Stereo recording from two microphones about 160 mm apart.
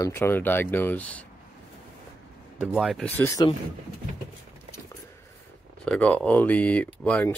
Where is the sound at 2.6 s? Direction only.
Centre (ahead or behind).